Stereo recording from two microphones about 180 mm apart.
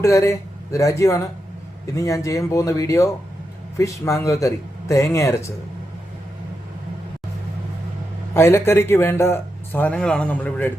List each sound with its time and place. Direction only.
0.0 s a man's voice: 15° left (ahead or behind)
8.3 s a man's voice: 15° left (ahead or behind)